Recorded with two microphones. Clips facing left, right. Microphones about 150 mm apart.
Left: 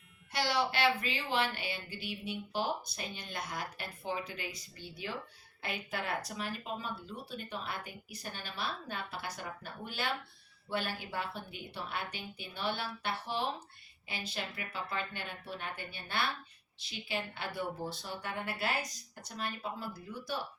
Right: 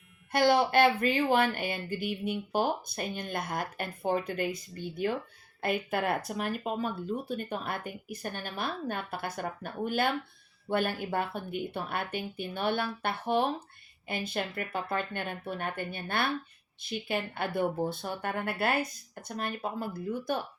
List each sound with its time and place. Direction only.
0.3 s speech: 50° right (ahead or behind)